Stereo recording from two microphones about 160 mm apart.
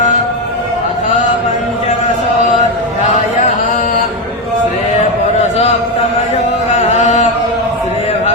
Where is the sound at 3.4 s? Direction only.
50° left (ahead or behind).